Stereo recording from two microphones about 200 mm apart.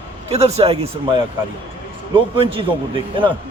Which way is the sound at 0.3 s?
30° right (ahead or behind).